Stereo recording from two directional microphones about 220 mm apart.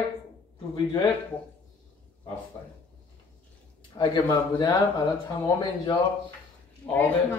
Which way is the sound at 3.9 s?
20° left (ahead or behind).